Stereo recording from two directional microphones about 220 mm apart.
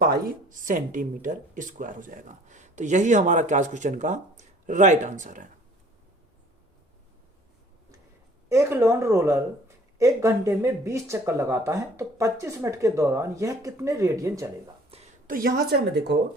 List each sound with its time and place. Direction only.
0.0 s speech: 40° right (ahead or behind)
8.4 s speech: 10° right (ahead or behind)
14.8 s a sound: 30° right (ahead or behind)
15.3 s a woman's voice: 40° right (ahead or behind)